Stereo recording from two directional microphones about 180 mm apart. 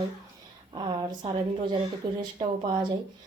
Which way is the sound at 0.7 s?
25° right (ahead or behind).